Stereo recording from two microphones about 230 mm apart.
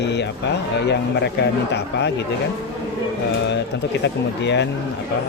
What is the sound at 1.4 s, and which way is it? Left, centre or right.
Speech, left.